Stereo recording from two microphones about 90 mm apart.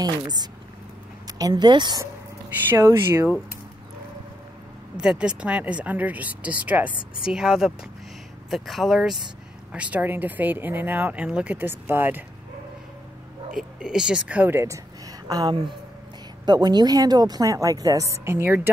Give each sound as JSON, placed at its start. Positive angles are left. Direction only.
{"t": 0.0, "sound": "speech", "side_deg": -50}
{"t": 1.5, "sound": "speech", "side_deg": -55}
{"t": 2.7, "sound": "speech", "side_deg": -30}
{"t": 5.0, "sound": "speech", "side_deg": -10}
{"t": 7.2, "sound": "speech", "side_deg": -5}
{"t": 9.7, "sound": "speech", "side_deg": -15}
{"t": 13.6, "sound": "speech", "side_deg": -10}
{"t": 14.5, "sound": "speech", "side_deg": -25}
{"t": 15.2, "sound": "a woman's voice", "side_deg": -45}